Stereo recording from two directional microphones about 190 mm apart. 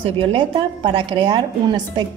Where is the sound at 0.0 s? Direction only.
30° right (ahead or behind).